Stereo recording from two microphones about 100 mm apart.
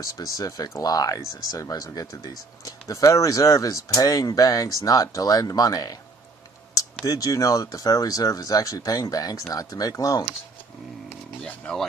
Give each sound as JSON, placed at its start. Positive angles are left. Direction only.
{"t": 0.0, "sound": "speech", "side_deg": 35}
{"t": 7.1, "sound": "speech", "side_deg": 35}
{"t": 11.4, "sound": "speech", "side_deg": 10}